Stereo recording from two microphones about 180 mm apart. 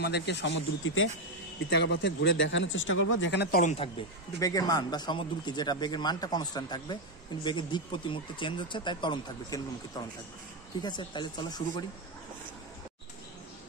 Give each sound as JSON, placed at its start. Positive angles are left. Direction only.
{"t": 0.0, "sound": "a man's voice", "side_deg": 70}
{"t": 1.7, "sound": "speech", "side_deg": 75}
{"t": 4.4, "sound": "speech", "side_deg": 20}